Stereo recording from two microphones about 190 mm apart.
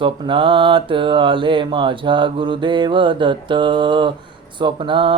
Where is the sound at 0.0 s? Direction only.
25° right (ahead or behind).